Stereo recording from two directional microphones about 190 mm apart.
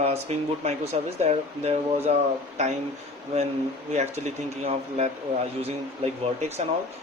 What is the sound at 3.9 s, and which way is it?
Speech, 35° right (ahead or behind).